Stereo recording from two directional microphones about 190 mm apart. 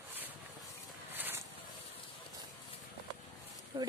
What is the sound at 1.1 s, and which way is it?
Vehicle, 10° right (ahead or behind).